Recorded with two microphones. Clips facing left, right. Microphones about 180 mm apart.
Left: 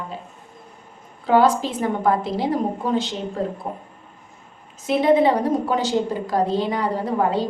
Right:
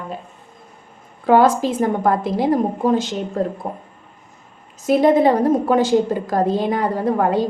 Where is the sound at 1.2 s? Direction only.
50° right (ahead or behind).